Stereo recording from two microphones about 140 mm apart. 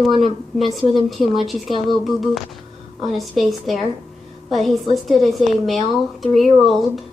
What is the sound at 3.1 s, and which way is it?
Speech, centre (ahead or behind).